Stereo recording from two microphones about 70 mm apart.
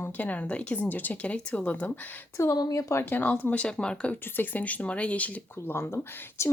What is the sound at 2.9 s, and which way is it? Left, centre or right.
A woman's voice, left.